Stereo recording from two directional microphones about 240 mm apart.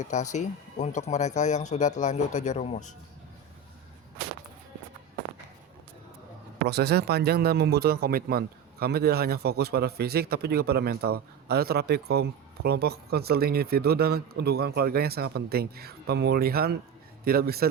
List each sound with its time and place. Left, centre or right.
0.0 s speech: left
6.7 s speech: right